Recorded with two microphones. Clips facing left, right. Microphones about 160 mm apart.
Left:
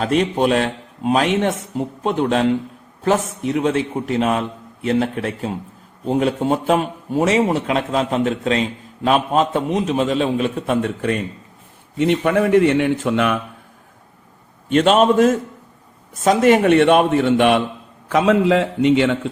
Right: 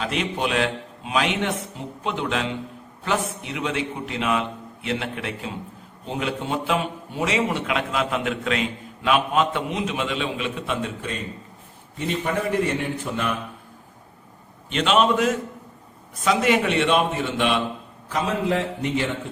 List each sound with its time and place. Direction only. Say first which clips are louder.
0.0 s a man's voice: left 8 dB; 40° left (ahead or behind); by 13.4 s 75° left (ahead or behind)
14.7 s a man's voice: left 6 dB; 45° left (ahead or behind)
18.1 s a man's voice: left 9 dB; 85° left